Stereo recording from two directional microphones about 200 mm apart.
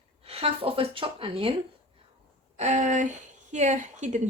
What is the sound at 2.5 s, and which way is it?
Speech, 35° right (ahead or behind).